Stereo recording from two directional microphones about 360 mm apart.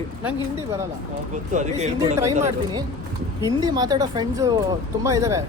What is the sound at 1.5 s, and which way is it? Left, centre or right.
Speech, centre.